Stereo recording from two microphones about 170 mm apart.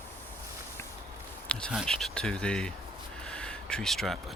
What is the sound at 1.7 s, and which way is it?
Speech, centre (ahead or behind).